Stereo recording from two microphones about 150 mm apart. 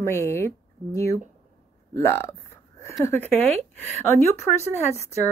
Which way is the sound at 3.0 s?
15° left (ahead or behind).